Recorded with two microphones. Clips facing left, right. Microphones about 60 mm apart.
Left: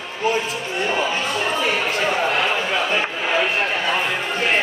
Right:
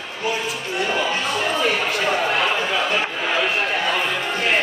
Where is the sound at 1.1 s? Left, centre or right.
Centre.